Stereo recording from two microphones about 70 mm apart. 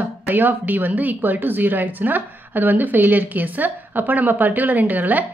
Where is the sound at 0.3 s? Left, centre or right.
Right.